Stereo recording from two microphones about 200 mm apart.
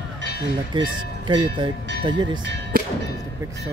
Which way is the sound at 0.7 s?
25° right (ahead or behind).